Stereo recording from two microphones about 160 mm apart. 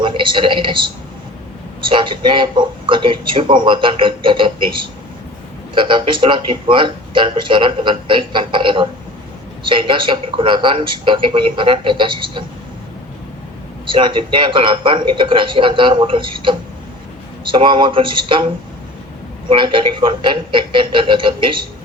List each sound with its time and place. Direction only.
0.0 s speech: 30° right (ahead or behind)
13.8 s speech: 30° right (ahead or behind)
19.5 s speech: 30° right (ahead or behind)